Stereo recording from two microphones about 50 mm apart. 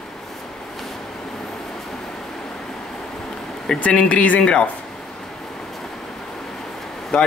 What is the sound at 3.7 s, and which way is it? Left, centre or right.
Speech, left.